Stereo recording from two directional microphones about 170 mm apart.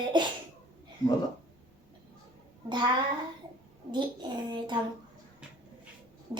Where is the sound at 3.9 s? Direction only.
25° right (ahead or behind).